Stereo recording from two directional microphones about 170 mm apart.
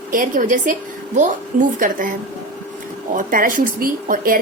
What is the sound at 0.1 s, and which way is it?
A woman's voice, 50° right (ahead or behind).